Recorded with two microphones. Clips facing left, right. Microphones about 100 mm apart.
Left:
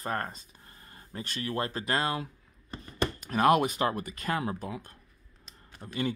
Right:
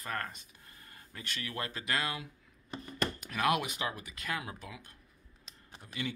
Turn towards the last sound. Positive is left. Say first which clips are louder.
# left 7 dB
turn(degrees=40)  # may be behind; listen again after turning